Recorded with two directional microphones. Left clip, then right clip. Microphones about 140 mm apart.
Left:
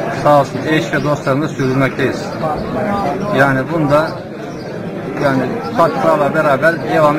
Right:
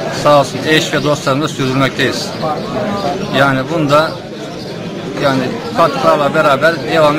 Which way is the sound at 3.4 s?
15° right (ahead or behind).